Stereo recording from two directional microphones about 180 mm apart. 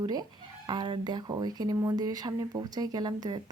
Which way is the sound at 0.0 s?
25° right (ahead or behind).